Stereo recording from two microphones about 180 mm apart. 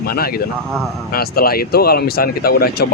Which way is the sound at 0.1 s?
55° left (ahead or behind).